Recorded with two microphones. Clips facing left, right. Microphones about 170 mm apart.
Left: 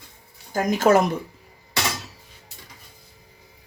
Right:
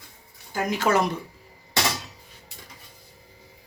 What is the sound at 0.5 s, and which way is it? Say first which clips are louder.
Speech: left 5 dB; 40° left (ahead or behind).